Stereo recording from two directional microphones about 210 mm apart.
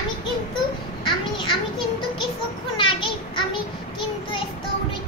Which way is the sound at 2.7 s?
25° left (ahead or behind).